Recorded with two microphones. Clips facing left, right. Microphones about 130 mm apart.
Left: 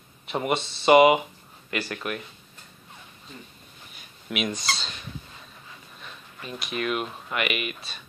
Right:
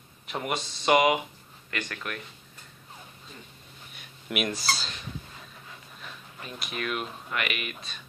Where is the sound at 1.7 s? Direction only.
15° left (ahead or behind).